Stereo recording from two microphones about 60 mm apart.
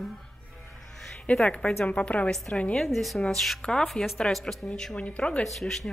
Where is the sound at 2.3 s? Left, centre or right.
Centre.